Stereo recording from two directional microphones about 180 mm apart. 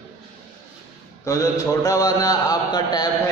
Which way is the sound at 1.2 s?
20° left (ahead or behind).